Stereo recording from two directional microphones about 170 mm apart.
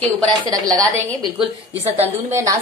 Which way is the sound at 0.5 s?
20° right (ahead or behind).